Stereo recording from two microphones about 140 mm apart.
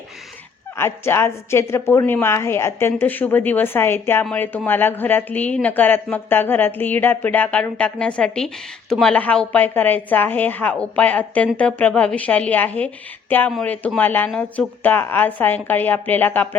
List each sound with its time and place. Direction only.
0.8 s a woman's voice: 15° left (ahead or behind)